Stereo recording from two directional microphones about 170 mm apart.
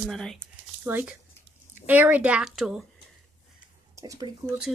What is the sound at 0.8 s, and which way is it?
Speech, 10° right (ahead or behind).